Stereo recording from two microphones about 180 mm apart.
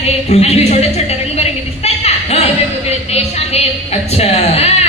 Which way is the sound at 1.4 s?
35° left (ahead or behind).